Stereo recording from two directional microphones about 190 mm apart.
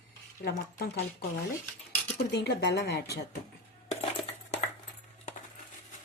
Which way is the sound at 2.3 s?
60° left (ahead or behind).